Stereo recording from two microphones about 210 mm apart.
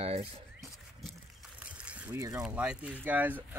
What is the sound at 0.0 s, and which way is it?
Zipper, 30° right (ahead or behind).